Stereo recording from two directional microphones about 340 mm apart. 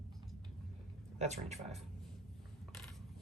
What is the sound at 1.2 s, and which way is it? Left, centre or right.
Speech, centre.